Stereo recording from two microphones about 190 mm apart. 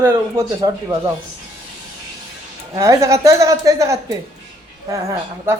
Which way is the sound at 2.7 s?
15° right (ahead or behind).